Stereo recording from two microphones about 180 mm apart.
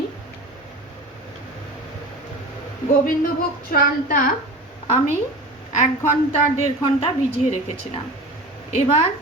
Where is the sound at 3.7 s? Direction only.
55° left (ahead or behind).